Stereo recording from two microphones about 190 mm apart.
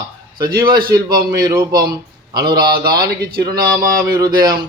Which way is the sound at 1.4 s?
20° right (ahead or behind).